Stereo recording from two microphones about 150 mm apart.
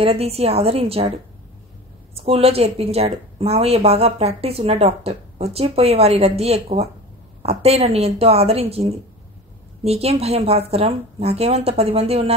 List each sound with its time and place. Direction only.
0.0 s a woman's voice: 40° right (ahead or behind)